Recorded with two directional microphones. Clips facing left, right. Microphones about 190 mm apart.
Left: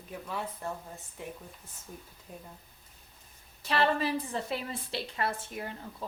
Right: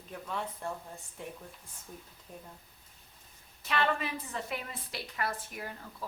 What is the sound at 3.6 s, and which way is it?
A woman's voice, 30° left (ahead or behind).